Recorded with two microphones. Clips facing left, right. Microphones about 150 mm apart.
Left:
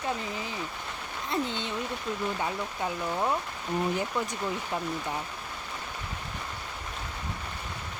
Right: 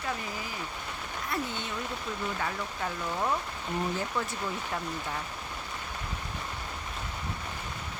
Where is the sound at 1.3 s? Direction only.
20° left (ahead or behind).